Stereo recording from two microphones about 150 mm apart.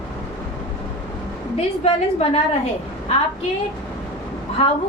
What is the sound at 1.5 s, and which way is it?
Speech, 45° left (ahead or behind).